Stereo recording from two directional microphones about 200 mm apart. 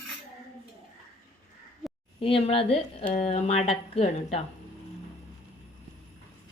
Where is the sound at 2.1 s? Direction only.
25° left (ahead or behind).